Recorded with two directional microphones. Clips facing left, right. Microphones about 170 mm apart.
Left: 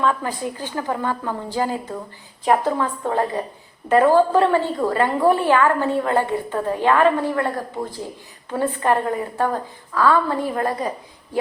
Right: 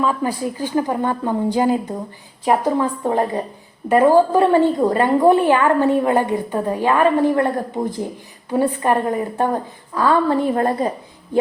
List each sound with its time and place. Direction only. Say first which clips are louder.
0.0 s a woman's voice: right 2 dB; 10° right (ahead or behind); by 10.9 s 30° right (ahead or behind)